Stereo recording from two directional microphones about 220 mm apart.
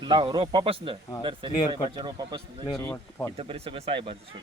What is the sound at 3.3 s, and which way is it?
Speech, 25° right (ahead or behind).